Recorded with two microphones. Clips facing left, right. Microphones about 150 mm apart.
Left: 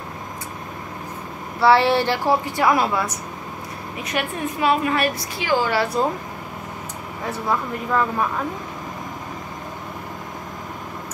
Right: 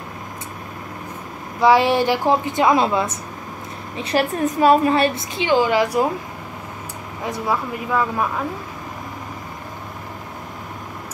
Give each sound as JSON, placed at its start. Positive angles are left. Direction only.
{"t": 1.6, "sound": "speech", "side_deg": -15}
{"t": 4.0, "sound": "a woman's voice", "side_deg": -35}
{"t": 4.9, "sound": "speech", "side_deg": -25}
{"t": 7.2, "sound": "speech", "side_deg": -10}